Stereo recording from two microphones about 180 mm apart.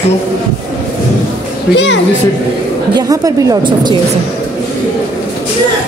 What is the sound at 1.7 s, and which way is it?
Speech, 80° left.